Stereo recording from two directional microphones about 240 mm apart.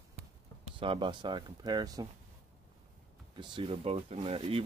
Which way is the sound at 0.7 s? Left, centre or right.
Right.